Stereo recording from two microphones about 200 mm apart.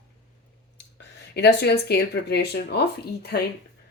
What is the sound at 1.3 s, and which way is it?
Speech, 55° left (ahead or behind).